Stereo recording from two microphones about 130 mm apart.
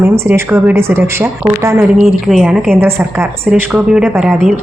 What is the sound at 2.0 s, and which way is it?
A woman's voice, centre (ahead or behind).